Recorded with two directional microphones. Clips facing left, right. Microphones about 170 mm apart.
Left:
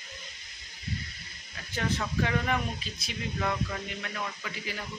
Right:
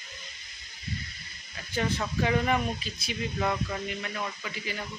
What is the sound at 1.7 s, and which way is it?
Speech, 5° right (ahead or behind).